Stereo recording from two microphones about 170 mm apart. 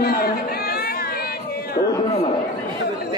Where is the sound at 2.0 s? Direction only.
35° left (ahead or behind).